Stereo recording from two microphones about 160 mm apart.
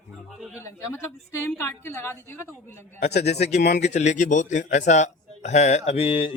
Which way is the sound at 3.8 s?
45° left (ahead or behind).